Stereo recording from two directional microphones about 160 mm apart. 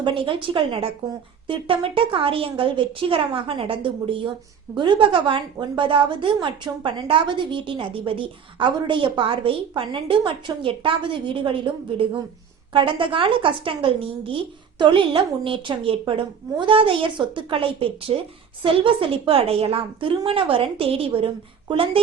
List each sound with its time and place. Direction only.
0.0 s a woman's voice: 30° right (ahead or behind)